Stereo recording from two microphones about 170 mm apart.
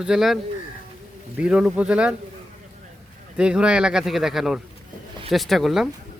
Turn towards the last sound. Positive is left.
turn(degrees=0)  # may be behind; listen again after turning